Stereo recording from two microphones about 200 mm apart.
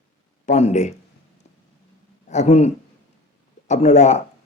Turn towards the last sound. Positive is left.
turn(degrees=35)  # may be behind; listen again after turning